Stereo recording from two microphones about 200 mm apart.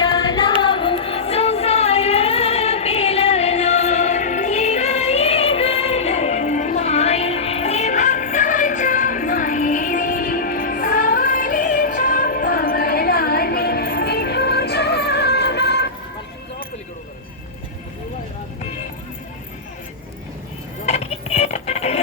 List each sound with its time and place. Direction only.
0.0 s singing: 20° left (ahead or behind)
0.6 s music: 25° left (ahead or behind); by 15.9 s 55° left (ahead or behind)
20.8 s music: 35° left (ahead or behind)